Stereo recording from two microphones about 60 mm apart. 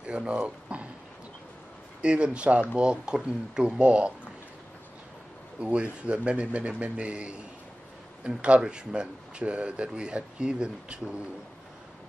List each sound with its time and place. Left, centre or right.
0.0 s a sound: centre
2.0 s speech: centre
5.6 s speech: centre